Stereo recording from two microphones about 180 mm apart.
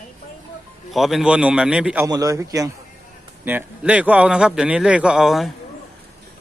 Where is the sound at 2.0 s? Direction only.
20° right (ahead or behind).